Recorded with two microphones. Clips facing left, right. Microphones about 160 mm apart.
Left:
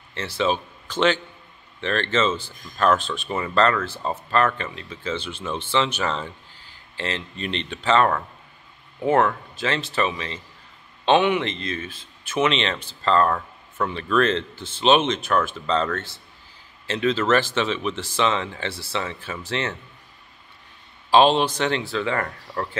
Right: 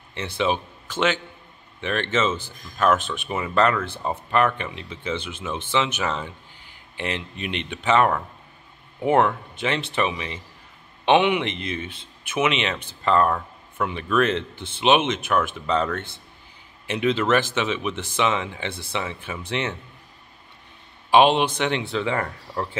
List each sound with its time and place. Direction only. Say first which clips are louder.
0.4 s speech: left 1 dB; 10° right (ahead or behind)
14.5 s speech: even; 60° right (ahead or behind)
14.8 s speech: left 1 dB; 10° right (ahead or behind)
21.1 s speech: even; 15° right (ahead or behind)